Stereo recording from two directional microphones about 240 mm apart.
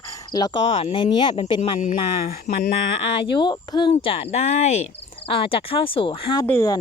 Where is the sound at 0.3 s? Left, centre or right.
Centre.